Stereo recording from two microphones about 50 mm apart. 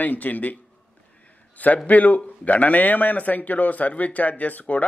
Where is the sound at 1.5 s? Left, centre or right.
Left.